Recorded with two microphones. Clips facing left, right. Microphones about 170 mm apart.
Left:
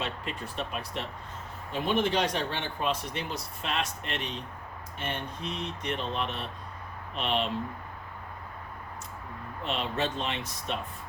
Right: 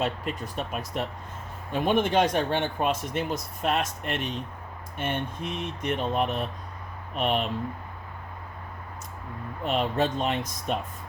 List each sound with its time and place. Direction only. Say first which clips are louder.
0.0 s speech: right 6 dB; 45° right (ahead or behind)
9.6 s speech: right 6 dB; 50° right (ahead or behind)